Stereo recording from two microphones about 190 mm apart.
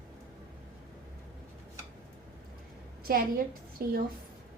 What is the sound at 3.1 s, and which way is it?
Speech, 50° right (ahead or behind).